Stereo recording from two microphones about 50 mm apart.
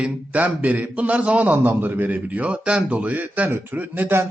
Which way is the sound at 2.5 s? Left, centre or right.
Right.